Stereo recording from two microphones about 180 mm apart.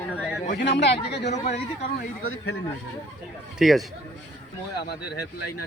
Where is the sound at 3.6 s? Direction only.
Centre (ahead or behind).